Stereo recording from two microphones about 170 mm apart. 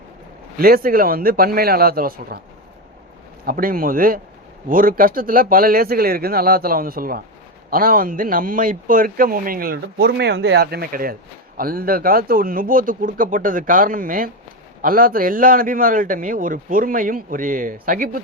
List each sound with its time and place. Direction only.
0.5 s a man's voice: 60° right (ahead or behind)
3.4 s a man's voice: 55° right (ahead or behind)